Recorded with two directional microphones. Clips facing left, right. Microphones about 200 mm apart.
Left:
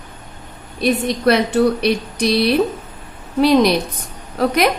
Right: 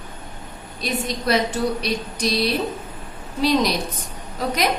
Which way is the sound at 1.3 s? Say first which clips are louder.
Left 7 dB; 65° left (ahead or behind).